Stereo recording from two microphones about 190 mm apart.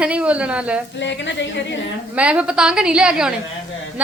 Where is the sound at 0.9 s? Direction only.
70° left (ahead or behind).